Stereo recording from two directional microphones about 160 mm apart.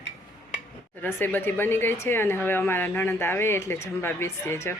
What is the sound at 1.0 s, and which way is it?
Speech, 10° left (ahead or behind).